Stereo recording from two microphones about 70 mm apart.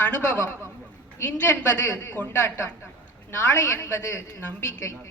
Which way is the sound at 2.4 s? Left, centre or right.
Left.